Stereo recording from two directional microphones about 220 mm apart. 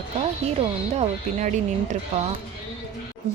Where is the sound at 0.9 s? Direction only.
35° right (ahead or behind).